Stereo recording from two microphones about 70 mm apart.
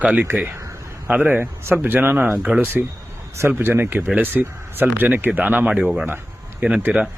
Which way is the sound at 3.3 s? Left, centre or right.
Right.